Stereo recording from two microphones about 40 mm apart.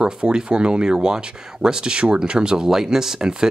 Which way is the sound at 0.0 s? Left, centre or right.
Centre.